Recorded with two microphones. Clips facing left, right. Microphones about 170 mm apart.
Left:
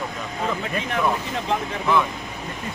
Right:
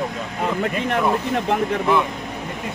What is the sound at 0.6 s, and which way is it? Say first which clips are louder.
Speech: right 5 dB; 60° right (ahead or behind).